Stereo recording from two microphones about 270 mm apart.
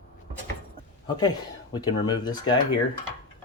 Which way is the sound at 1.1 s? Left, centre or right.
Centre.